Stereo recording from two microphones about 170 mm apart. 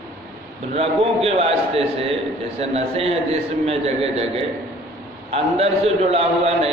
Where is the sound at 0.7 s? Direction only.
35° right (ahead or behind).